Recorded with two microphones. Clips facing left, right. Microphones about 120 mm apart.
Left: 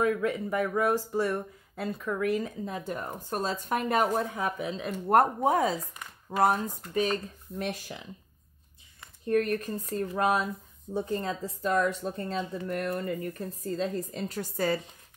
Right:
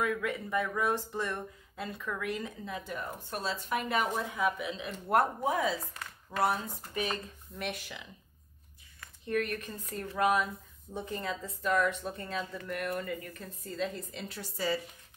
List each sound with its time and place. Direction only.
0.0 s speech: 30° left (ahead or behind)
0.5 s speech: 10° left (ahead or behind)
2.1 s a woman's voice: 40° left (ahead or behind)
9.2 s speech: 40° left (ahead or behind)